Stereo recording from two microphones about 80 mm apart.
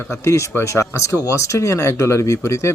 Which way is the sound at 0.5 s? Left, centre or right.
Left.